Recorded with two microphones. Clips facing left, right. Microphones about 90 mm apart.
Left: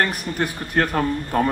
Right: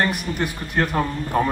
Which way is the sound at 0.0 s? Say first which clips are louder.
Even; 45° left (ahead or behind).